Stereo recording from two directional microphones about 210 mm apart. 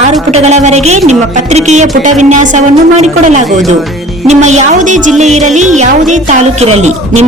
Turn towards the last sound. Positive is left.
turn(degrees=-30)  # may be behind; listen again after turning